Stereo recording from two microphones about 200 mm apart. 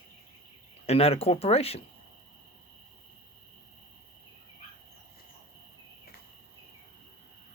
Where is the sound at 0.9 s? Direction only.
30° left (ahead or behind).